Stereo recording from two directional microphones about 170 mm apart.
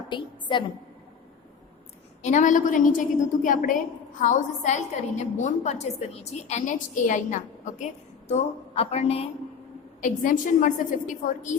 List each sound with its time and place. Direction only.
0.1 s a woman's voice: 30° left (ahead or behind)
2.2 s a woman's voice: 45° left (ahead or behind)
10.0 s a woman's voice: 50° left (ahead or behind)